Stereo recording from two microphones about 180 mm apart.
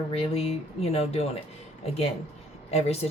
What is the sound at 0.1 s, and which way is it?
Speech, 35° left (ahead or behind).